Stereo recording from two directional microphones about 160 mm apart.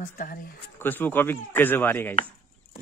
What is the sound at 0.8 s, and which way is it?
Speech, 10° left (ahead or behind).